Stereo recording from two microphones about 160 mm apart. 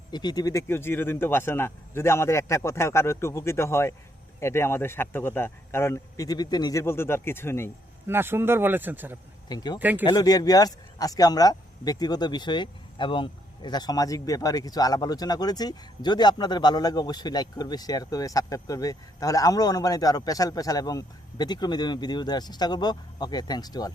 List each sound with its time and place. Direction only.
0.1 s a man's voice: 25° left (ahead or behind)
8.0 s speech: 15° right (ahead or behind)
9.5 s speech: 25° left (ahead or behind)
9.7 s speech: 10° right (ahead or behind)
10.1 s speech: 25° left (ahead or behind)